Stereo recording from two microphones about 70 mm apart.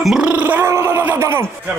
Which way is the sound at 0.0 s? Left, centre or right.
Centre.